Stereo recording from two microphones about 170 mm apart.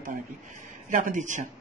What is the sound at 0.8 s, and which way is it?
Speech, 50° right (ahead or behind).